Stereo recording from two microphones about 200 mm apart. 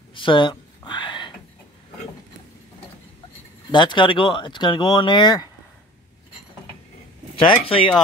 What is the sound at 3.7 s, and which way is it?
Speech, 20° left (ahead or behind).